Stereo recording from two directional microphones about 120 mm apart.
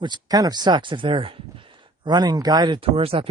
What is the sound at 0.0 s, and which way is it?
Speech, 35° right (ahead or behind).